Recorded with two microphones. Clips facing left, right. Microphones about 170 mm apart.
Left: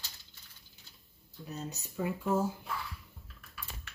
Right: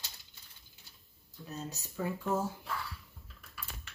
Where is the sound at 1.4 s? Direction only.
15° left (ahead or behind).